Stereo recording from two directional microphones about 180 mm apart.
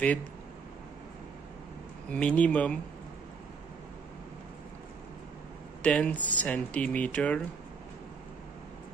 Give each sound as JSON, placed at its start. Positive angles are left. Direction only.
{"t": 2.0, "sound": "speech", "side_deg": 5}
{"t": 5.8, "sound": "speech", "side_deg": 5}